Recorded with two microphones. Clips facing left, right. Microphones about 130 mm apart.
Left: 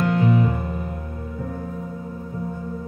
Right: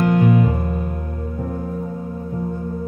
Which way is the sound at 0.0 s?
50° right (ahead or behind).